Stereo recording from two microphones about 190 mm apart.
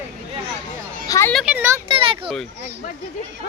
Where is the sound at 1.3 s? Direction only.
5° right (ahead or behind).